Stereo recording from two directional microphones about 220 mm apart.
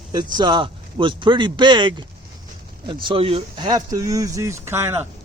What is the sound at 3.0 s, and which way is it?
Speech, 25° right (ahead or behind).